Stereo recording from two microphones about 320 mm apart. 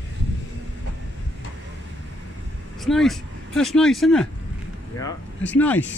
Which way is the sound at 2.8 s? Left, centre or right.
Centre.